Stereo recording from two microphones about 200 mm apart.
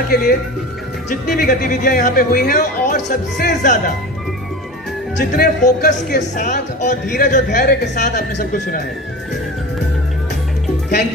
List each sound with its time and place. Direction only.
0.1 s speech: 45° left (ahead or behind)
5.3 s speech: 40° left (ahead or behind)